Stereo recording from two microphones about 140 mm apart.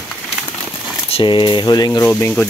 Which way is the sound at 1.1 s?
35° left (ahead or behind).